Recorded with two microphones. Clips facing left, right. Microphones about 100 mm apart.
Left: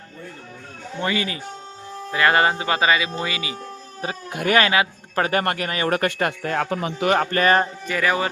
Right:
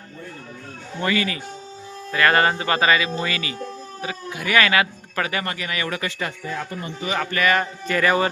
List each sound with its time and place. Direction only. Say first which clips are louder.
1.0 s speech: right 2 dB; 25° left (ahead or behind)
4.0 s speech: left 4 dB; 45° left (ahead or behind); by 7.1 s 90° left
7.2 s speech: even; 40° left (ahead or behind)
7.9 s a man's voice: right 2 dB; 5° left (ahead or behind)